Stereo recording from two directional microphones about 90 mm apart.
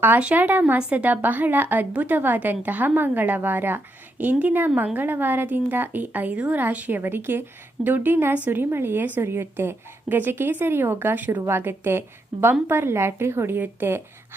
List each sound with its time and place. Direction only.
0.0 s a woman's voice: 15° right (ahead or behind)